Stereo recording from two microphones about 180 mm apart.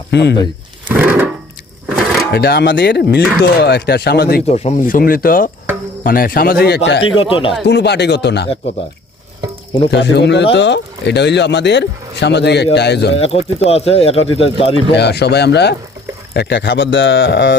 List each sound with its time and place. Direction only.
0.1 s speech: 70° left (ahead or behind)
0.9 s a sound: 10° right (ahead or behind)
2.3 s speech: 65° left (ahead or behind)
4.4 s speech: 35° left (ahead or behind); by 7.0 s 65° left (ahead or behind)
7.0 s speech: 30° left (ahead or behind)
7.6 s speech: 70° left (ahead or behind)
9.9 s speech: 70° left (ahead or behind)
13.1 s speech: 35° left (ahead or behind)
14.8 s speech: 70° left (ahead or behind); by 17.5 s 90° left